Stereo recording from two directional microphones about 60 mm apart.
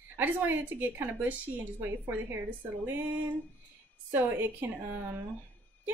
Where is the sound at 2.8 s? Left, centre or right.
Right.